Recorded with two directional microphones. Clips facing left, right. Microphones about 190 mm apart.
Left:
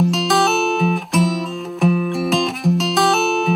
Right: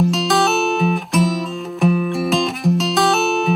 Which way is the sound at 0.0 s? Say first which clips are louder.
Even; centre (ahead or behind).